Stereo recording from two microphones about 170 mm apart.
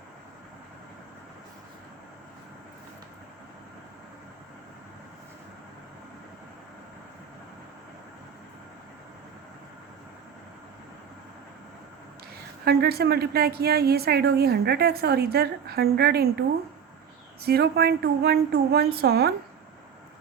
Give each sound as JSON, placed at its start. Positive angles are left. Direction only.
{"t": 12.6, "sound": "a woman's voice", "side_deg": -65}
{"t": 17.4, "sound": "a woman's voice", "side_deg": -70}